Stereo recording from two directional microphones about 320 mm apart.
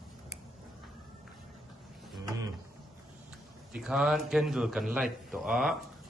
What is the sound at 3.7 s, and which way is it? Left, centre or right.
A man's voice, centre.